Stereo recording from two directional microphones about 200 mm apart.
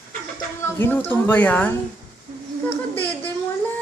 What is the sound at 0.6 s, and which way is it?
A child's voice, 10° left (ahead or behind).